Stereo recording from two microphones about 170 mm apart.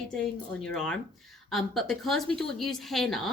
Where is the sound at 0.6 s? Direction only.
5° left (ahead or behind).